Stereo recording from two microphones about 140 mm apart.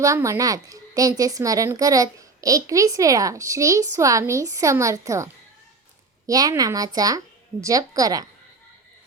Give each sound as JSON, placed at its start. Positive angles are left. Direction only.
{"t": 0.0, "sound": "speech", "side_deg": -20}